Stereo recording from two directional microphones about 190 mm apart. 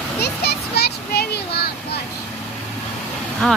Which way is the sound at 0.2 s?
60° left (ahead or behind).